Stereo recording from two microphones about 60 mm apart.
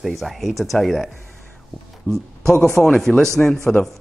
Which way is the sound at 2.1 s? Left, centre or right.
Left.